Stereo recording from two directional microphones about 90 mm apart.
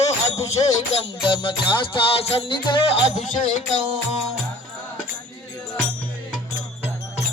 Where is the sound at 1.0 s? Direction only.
65° left (ahead or behind).